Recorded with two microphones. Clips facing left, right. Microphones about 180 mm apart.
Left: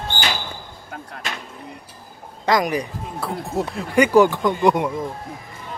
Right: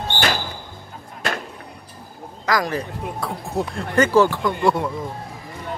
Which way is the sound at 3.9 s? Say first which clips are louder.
Left 2 dB; 15° left (ahead or behind).